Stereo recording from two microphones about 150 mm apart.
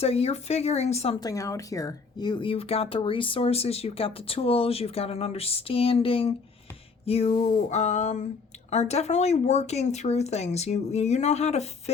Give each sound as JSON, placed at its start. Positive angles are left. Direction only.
{"t": 0.0, "sound": "speech", "side_deg": 45}
{"t": 1.2, "sound": "speech", "side_deg": 20}
{"t": 7.0, "sound": "a sound", "side_deg": 40}
{"t": 7.4, "sound": "speech", "side_deg": 50}